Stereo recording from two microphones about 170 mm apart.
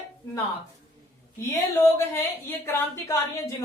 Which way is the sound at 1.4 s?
15° left (ahead or behind).